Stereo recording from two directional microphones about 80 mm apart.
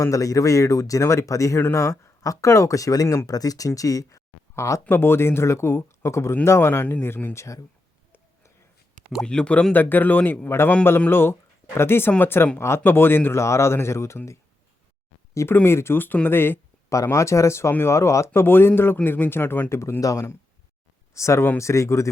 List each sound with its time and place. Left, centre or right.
0.0 s speech: left
9.2 s a man's voice: centre; by 14.2 s left
15.6 s a man's voice: left
16.9 s a man's voice: left
19.7 s speech: left